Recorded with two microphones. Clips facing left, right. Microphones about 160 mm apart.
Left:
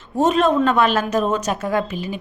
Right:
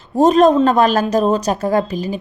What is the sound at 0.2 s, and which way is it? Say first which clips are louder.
A woman's voice: right 6 dB; 40° right (ahead or behind).